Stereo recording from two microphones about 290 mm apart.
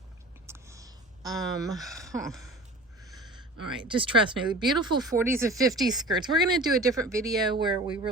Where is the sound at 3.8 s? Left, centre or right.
Centre.